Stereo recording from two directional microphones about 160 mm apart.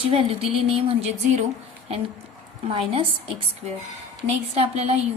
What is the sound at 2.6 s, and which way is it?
A woman's voice, 35° right (ahead or behind).